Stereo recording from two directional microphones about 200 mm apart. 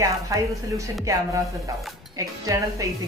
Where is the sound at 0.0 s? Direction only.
15° right (ahead or behind).